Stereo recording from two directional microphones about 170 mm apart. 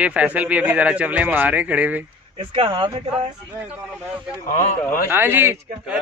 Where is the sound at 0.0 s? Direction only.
10° right (ahead or behind).